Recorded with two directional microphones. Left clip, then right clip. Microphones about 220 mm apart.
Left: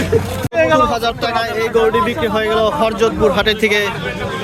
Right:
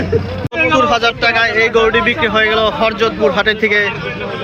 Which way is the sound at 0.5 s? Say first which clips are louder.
Left 1 dB; 45° left (ahead or behind).